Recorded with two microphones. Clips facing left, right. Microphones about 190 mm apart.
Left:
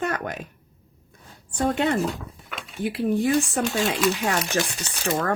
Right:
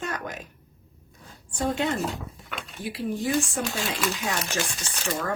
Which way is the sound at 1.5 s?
55° left (ahead or behind).